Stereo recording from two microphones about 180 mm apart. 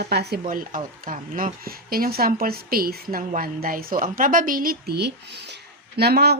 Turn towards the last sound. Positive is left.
turn(degrees=-65)  # may be behind; listen again after turning